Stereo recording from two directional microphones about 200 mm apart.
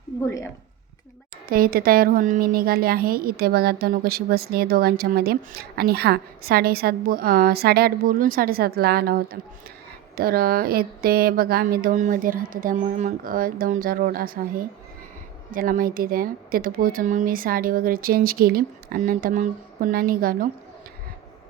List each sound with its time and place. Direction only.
1.5 s a woman's voice: 45° right (ahead or behind)
15.5 s a woman's voice: 45° right (ahead or behind)